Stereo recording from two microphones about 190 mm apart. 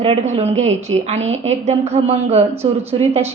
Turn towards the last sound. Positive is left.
turn(degrees=-35)  # may be behind; listen again after turning